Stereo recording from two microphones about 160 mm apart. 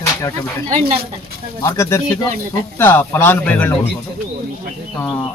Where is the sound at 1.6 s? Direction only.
15° left (ahead or behind).